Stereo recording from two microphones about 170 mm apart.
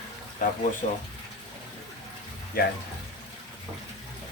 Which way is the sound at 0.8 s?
50° left (ahead or behind).